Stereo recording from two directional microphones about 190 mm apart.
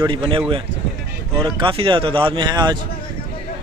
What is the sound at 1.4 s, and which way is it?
Speech, 30° right (ahead or behind).